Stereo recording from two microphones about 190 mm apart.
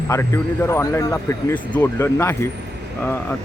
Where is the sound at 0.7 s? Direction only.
15° left (ahead or behind).